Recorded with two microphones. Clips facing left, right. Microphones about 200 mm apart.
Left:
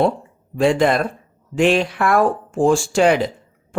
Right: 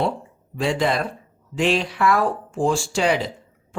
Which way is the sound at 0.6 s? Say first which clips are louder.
Left 6 dB; 50° left (ahead or behind).